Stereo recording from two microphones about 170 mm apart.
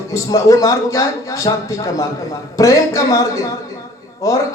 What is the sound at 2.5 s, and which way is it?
Speech, 20° left (ahead or behind).